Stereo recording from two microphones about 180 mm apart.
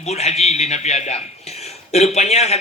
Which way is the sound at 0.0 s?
35° left (ahead or behind).